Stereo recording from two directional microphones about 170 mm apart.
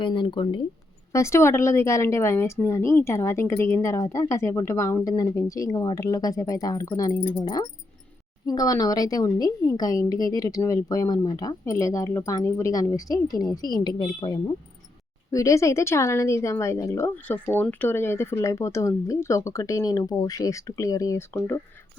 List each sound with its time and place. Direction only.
0.0 s a woman's voice: 25° left (ahead or behind)
1.1 s a woman's voice: 15° left (ahead or behind)